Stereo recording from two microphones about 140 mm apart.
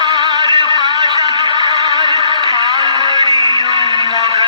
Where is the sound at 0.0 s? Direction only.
30° right (ahead or behind).